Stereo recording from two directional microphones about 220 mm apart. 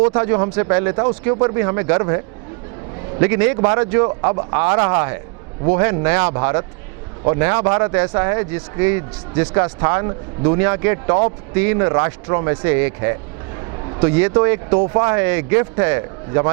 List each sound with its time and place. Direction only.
0.0 s a man's voice: 20° right (ahead or behind)